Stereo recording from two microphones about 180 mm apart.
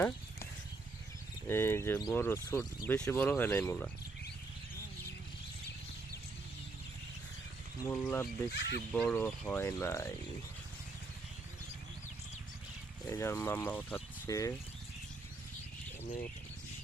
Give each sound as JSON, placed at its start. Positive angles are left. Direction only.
{"t": 1.5, "sound": "speech", "side_deg": 15}
{"t": 7.9, "sound": "speech", "side_deg": 10}
{"t": 8.4, "sound": "speech", "side_deg": 70}
{"t": 8.9, "sound": "speech", "side_deg": 5}
{"t": 13.1, "sound": "speech", "side_deg": 15}
{"t": 16.0, "sound": "speech", "side_deg": 50}